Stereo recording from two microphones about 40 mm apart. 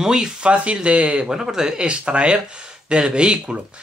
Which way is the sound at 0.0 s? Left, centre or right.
Centre.